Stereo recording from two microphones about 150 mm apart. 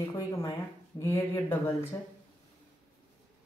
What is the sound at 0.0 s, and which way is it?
A woman's voice, 20° left (ahead or behind).